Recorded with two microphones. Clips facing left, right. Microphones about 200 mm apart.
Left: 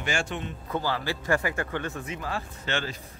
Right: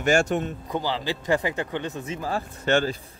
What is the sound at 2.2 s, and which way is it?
Speech, 40° right (ahead or behind).